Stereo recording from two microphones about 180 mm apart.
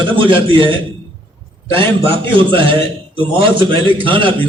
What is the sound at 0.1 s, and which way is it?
A man's voice, 30° right (ahead or behind).